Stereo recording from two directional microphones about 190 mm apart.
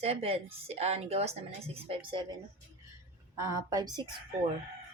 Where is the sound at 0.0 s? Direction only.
30° right (ahead or behind).